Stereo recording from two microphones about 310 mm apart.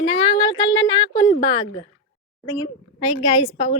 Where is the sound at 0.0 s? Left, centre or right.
Centre.